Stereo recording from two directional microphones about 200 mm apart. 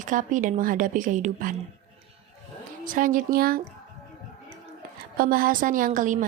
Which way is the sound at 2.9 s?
45° right (ahead or behind).